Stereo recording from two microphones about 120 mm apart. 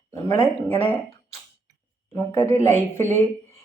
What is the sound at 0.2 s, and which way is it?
Speech, 25° left (ahead or behind).